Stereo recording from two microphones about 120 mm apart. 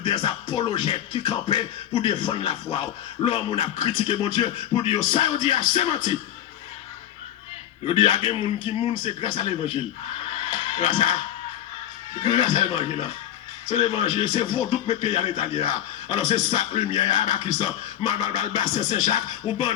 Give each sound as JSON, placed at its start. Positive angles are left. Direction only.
{"t": 0.0, "sound": "music", "side_deg": 40}
{"t": 7.9, "sound": "music", "side_deg": 45}
{"t": 12.2, "sound": "music", "side_deg": 40}